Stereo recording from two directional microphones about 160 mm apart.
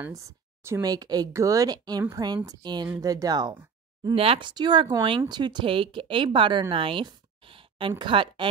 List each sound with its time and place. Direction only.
0.0 s speech: 20° right (ahead or behind)
4.1 s a woman's voice: 35° right (ahead or behind)
6.7 s a sound: 35° right (ahead or behind)
8.0 s a woman's voice: 30° right (ahead or behind)